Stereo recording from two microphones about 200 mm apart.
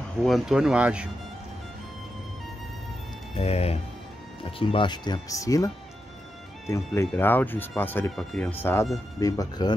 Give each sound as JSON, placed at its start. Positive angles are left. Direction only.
{"t": 0.2, "sound": "speech", "side_deg": 0}
{"t": 3.3, "sound": "speech", "side_deg": 30}
{"t": 6.7, "sound": "speech", "side_deg": 10}